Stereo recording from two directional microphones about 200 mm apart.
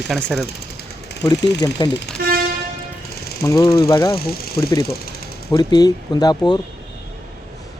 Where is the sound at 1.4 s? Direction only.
60° left (ahead or behind).